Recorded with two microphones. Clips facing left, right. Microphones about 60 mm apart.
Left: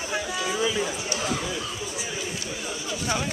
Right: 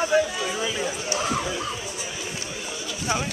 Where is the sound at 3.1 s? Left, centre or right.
Centre.